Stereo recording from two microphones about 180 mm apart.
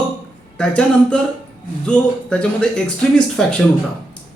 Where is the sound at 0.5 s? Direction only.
5° left (ahead or behind).